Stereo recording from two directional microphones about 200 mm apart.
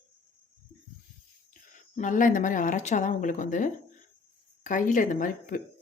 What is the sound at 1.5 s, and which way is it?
Speech, 40° left (ahead or behind).